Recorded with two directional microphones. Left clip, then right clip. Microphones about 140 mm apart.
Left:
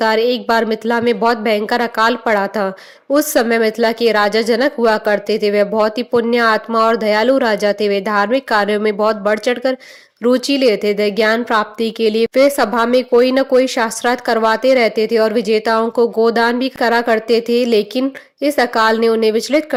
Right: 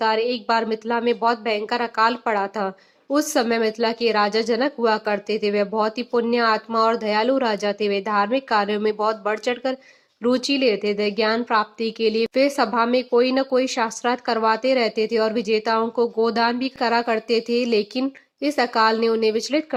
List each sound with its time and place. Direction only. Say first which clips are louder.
0.0 s speech: left 7 dB; 40° left (ahead or behind)